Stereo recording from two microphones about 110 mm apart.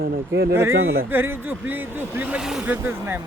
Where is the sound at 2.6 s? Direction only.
20° right (ahead or behind).